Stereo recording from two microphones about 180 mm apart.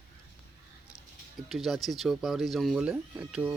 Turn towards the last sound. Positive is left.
turn(degrees=-5)  # may be behind; listen again after turning